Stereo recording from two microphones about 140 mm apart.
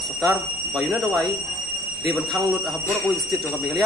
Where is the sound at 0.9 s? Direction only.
Centre (ahead or behind).